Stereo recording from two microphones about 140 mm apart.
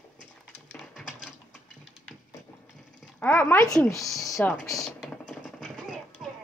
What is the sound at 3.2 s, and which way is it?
Speech, 15° left (ahead or behind).